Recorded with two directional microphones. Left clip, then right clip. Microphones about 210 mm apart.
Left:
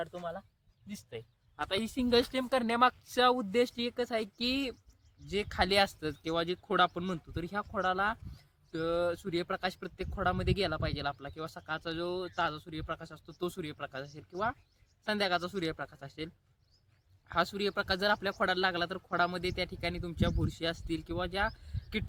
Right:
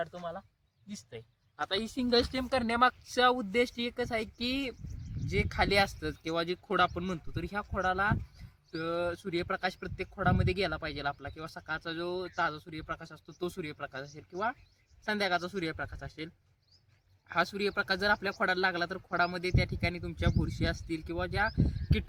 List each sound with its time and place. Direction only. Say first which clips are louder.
0.0 s speech: right 1 dB; 15° left (ahead or behind)
1.5 s speech: right 1 dB; 20° left (ahead or behind); by 21.5 s centre (ahead or behind)